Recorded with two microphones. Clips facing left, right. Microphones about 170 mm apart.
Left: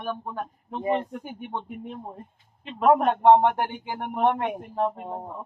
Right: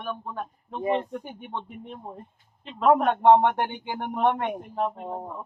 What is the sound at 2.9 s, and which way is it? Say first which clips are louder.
A man's voice: even; centre (ahead or behind).